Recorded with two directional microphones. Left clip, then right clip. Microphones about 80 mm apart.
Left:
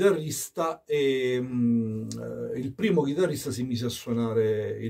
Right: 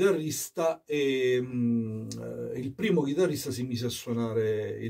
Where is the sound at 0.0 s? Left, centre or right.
Left.